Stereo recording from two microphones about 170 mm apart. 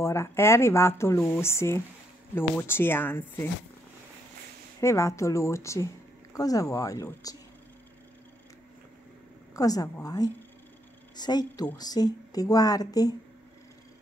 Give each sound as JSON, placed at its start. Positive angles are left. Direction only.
{"t": 0.0, "sound": "speech", "side_deg": 15}
{"t": 4.7, "sound": "speech", "side_deg": 15}
{"t": 9.6, "sound": "speech", "side_deg": 20}